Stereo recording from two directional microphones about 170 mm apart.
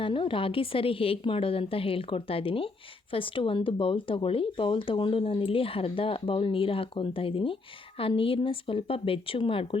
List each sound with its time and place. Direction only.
0.0 s speech: 30° left (ahead or behind)